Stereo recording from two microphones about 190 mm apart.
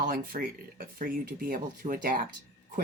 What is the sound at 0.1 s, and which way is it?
Speech, 45° right (ahead or behind).